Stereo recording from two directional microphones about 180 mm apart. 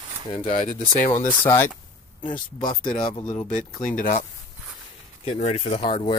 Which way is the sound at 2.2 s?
25° left (ahead or behind).